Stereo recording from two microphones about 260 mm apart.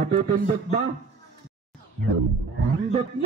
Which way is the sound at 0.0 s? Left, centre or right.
Right.